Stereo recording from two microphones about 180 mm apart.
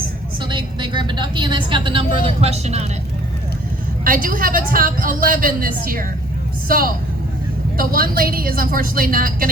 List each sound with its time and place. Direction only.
0.4 s a woman's voice: 25° right (ahead or behind)
4.0 s a woman's voice: 50° right (ahead or behind)